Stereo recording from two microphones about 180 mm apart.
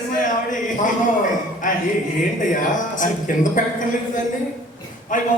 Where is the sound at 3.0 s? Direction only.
45° left (ahead or behind).